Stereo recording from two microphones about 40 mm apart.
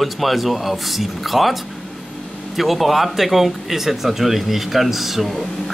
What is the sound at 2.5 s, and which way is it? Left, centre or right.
Speech, centre.